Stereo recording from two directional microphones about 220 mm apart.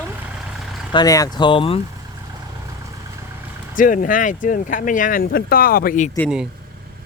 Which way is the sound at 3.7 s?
40° left (ahead or behind).